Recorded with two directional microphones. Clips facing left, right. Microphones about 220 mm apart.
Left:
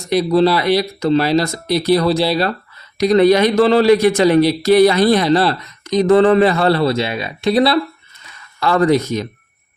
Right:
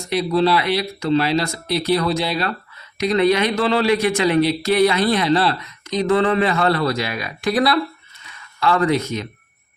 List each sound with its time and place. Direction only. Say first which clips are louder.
0.1 s a man's voice: left 4 dB; 40° left (ahead or behind)
8.6 s a man's voice: left 4 dB; 40° left (ahead or behind)